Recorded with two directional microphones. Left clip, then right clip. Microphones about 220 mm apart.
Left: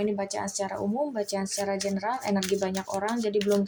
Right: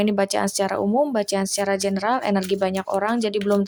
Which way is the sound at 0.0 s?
25° right (ahead or behind).